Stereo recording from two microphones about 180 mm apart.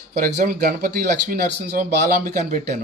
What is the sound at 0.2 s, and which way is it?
Speech, 50° right (ahead or behind).